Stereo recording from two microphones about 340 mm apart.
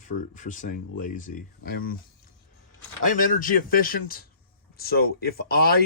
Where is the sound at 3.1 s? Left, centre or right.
Left.